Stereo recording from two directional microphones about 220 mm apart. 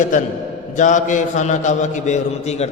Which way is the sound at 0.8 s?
35° left (ahead or behind).